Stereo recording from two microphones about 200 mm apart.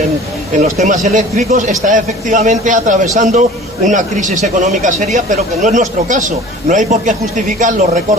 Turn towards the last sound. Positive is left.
turn(degrees=-40)  # may be behind; listen again after turning